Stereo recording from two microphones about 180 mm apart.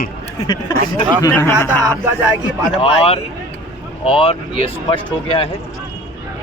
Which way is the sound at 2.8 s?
30° left (ahead or behind).